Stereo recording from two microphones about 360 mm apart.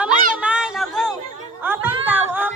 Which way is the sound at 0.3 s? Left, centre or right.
Centre.